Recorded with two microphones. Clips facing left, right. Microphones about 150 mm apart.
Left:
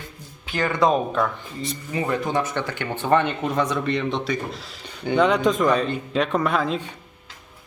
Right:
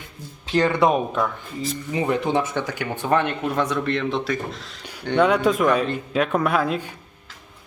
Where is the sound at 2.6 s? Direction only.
10° right (ahead or behind).